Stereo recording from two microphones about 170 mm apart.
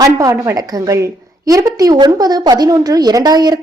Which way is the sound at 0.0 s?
20° right (ahead or behind).